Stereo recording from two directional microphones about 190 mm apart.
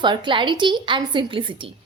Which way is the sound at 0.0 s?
25° right (ahead or behind).